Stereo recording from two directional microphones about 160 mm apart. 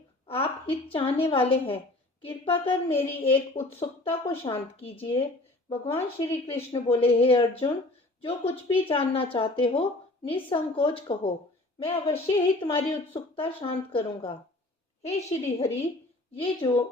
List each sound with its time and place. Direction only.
0.3 s a woman's voice: 35° left (ahead or behind)
15.4 s a woman's voice: 40° left (ahead or behind)